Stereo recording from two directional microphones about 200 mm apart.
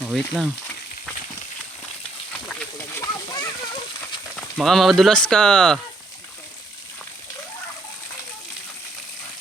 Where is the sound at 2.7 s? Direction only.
15° left (ahead or behind).